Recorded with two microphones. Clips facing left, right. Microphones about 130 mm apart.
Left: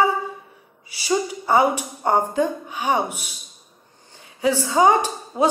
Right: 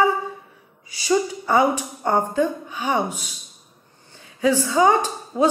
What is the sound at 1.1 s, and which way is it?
Speech, 30° left (ahead or behind).